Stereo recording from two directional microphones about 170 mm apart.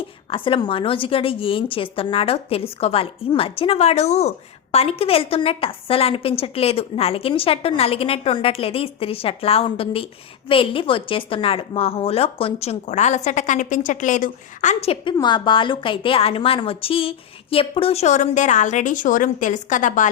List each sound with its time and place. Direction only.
0.0 s a woman's voice: 30° left (ahead or behind); by 20.1 s 50° left (ahead or behind)